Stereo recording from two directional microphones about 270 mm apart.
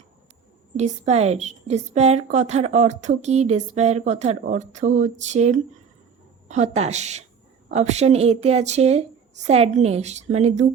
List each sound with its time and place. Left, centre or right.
0.8 s a woman's voice: right